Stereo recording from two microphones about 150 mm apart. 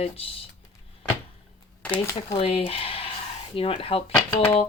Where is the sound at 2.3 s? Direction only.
40° left (ahead or behind).